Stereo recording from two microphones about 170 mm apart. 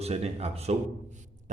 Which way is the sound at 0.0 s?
40° right (ahead or behind).